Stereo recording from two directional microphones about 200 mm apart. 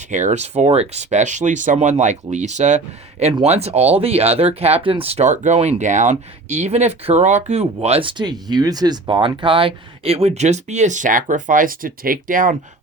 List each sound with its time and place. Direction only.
0.1 s speech: 35° right (ahead or behind)